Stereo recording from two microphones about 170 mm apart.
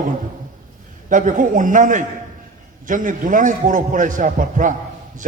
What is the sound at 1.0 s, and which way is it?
A woman's voice, 50° right (ahead or behind).